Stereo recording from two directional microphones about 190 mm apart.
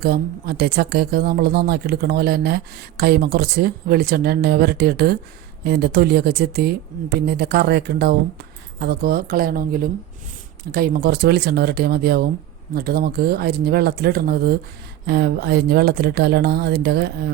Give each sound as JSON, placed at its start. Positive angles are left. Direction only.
{"t": 0.0, "sound": "speech", "side_deg": -55}